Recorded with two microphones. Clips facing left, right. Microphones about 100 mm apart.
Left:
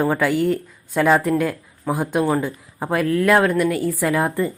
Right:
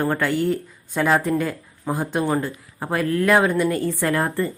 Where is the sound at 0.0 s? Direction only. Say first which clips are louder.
Left 3 dB; 5° left (ahead or behind).